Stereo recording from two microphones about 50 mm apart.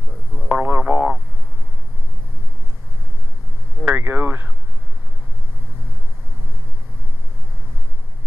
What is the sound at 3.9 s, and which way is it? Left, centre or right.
Speech, right.